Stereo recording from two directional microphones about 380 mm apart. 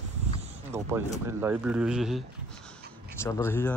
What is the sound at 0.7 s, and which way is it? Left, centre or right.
Speech, centre.